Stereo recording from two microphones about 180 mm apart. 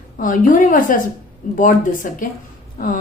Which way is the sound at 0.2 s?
45° left (ahead or behind).